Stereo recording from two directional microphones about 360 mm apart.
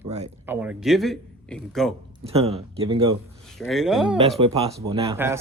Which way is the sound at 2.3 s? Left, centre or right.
Centre.